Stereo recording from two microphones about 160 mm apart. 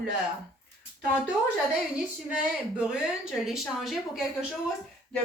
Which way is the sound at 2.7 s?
5° right (ahead or behind).